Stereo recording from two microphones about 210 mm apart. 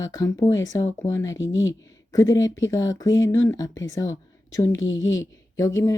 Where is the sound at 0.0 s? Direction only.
15° left (ahead or behind).